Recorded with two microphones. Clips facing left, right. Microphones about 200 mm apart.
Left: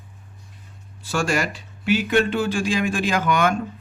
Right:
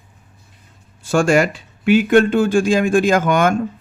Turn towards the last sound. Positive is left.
turn(degrees=-50)  # may be behind; listen again after turning